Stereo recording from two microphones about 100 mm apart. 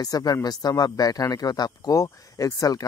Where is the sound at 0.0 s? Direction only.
40° left (ahead or behind).